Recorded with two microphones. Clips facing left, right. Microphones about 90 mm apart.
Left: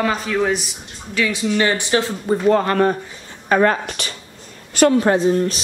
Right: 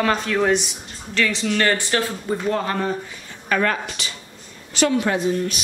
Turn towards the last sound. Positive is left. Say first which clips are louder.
# left 5 dB
turn(degrees=35)  # may be behind; listen again after turning